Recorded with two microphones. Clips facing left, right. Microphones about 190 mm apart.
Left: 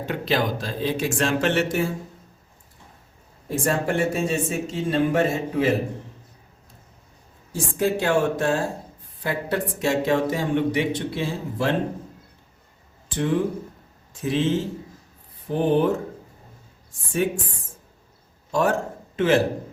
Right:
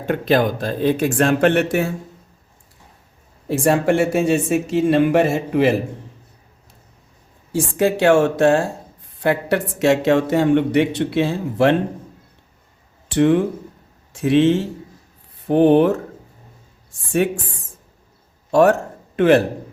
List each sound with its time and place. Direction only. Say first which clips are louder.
0.0 s speech: right 7 dB; 50° right (ahead or behind)
3.5 s speech: right 7 dB; 85° right
7.5 s speech: right 5 dB; 75° right (ahead or behind)
13.1 s speech: right 7 dB; 70° right (ahead or behind)
17.1 s speech: right 5 dB; 75° right (ahead or behind)
18.5 s a man's voice: right 8 dB; 65° right (ahead or behind)